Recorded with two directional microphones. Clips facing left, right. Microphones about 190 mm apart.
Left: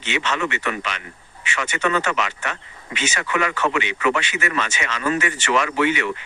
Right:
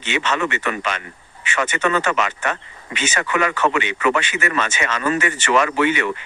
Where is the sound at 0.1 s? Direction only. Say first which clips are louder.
Right 2 dB; 50° right (ahead or behind).